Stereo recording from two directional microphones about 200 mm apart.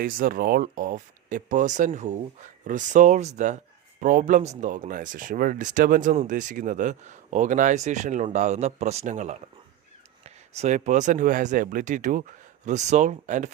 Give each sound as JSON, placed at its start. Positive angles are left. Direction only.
{"t": 0.0, "sound": "speech", "side_deg": -45}